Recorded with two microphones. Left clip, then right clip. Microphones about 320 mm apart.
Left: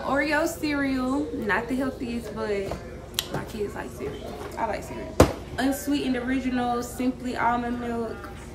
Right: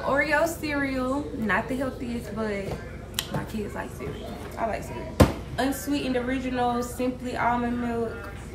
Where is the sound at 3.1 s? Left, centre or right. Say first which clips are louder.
Left 1 dB; centre.